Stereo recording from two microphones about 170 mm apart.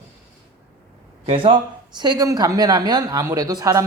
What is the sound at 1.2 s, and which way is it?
Speech, 30° right (ahead or behind).